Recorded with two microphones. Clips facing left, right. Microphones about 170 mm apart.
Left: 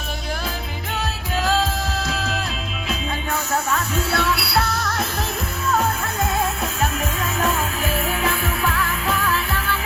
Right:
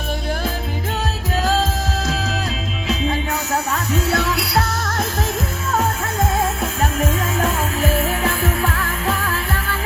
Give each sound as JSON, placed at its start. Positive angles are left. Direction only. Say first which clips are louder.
{"t": 2.0, "sound": "music", "louder": "right 2 dB", "side_deg": -40}
{"t": 3.7, "sound": "music", "louder": "right 2 dB", "side_deg": -40}